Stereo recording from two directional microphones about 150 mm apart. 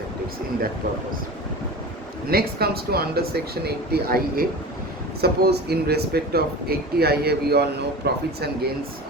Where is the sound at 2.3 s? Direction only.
90° right.